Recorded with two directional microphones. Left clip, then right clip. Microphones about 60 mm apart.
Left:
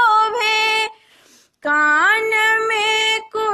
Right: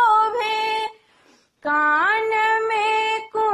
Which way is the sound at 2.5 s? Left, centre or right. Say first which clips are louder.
Left 3 dB; left.